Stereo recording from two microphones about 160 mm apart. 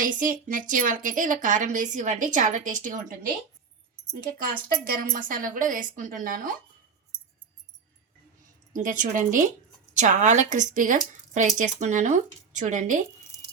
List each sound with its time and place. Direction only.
0.0 s a woman's voice: 55° right (ahead or behind)
4.1 s a woman's voice: 65° right (ahead or behind)
8.7 s a woman's voice: 55° right (ahead or behind)